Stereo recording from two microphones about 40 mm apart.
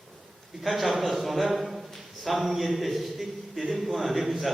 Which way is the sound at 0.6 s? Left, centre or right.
Centre.